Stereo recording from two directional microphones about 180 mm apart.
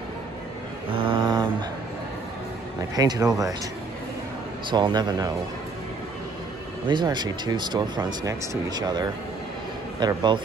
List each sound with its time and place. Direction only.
0.9 s mantra: 30° right (ahead or behind)
3.0 s speech: 20° right (ahead or behind)
4.6 s speech: 25° right (ahead or behind)
6.9 s speech: 25° right (ahead or behind)